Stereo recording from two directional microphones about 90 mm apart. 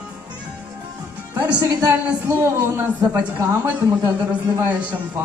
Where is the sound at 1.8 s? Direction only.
25° right (ahead or behind).